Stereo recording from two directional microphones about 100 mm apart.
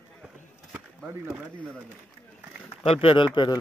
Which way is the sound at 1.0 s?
10° right (ahead or behind).